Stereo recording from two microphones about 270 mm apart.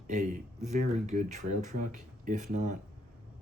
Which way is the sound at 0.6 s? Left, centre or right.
Right.